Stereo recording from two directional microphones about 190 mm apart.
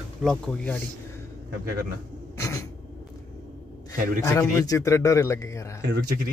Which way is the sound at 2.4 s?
15° left (ahead or behind).